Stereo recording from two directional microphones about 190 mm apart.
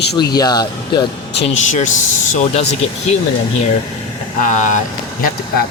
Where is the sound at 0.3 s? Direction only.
20° left (ahead or behind).